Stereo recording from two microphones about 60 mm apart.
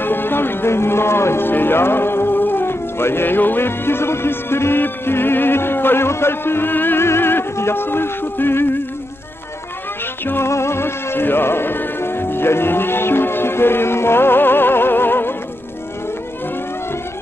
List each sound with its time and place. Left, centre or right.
0.0 s speech: left
10.2 s music: left